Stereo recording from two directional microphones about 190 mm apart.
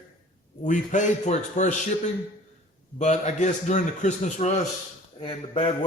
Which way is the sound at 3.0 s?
40° left (ahead or behind).